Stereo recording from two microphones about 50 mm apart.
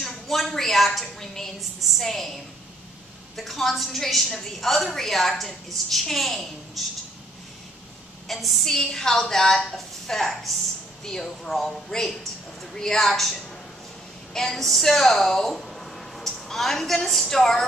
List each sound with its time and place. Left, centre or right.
0.0 s a woman's voice: centre
3.3 s a woman's voice: centre
8.3 s a woman's voice: centre